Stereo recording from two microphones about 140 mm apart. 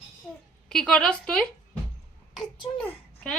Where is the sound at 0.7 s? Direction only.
5° left (ahead or behind).